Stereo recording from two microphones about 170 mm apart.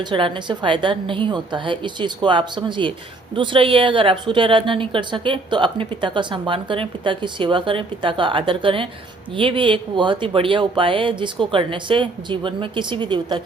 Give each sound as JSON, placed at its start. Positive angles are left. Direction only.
{"t": 0.0, "sound": "a woman's voice", "side_deg": -30}